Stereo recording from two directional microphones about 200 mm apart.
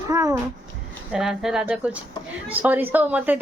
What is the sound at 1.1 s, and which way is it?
A woman's voice, centre (ahead or behind).